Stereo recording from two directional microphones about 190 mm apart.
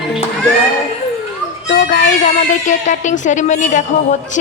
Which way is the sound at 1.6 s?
45° left (ahead or behind).